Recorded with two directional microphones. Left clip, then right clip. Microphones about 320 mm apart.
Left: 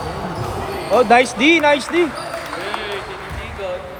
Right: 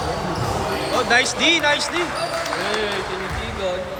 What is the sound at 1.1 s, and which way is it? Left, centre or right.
Speech, centre.